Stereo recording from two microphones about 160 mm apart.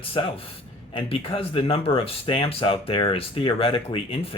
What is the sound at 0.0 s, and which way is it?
Speech, 35° left (ahead or behind).